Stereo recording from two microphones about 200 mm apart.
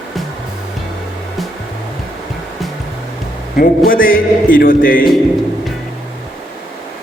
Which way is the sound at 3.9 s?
45° left (ahead or behind).